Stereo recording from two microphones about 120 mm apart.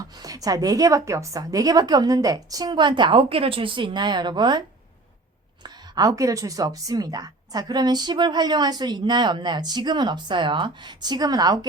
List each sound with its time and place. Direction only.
0.0 s a woman's voice: 30° right (ahead or behind)
5.6 s a woman's voice: 35° right (ahead or behind)